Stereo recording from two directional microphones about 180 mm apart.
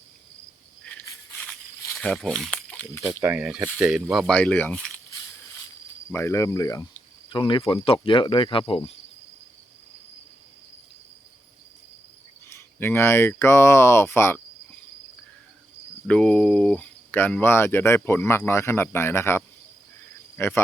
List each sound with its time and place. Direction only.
0.9 s insect: 10° left (ahead or behind)
2.0 s speech: centre (ahead or behind)
3.1 s speech: 15° right (ahead or behind); by 4.8 s 10° left (ahead or behind)
6.1 s speech: 15° left (ahead or behind); by 8.9 s 30° left (ahead or behind)
12.5 s speech: 15° left (ahead or behind)
16.0 s speech: 5° left (ahead or behind)